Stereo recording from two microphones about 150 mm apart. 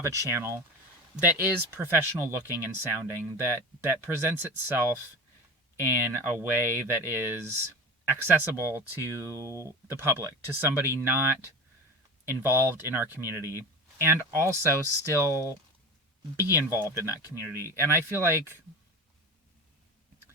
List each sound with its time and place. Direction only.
0.2 s speech: 15° right (ahead or behind)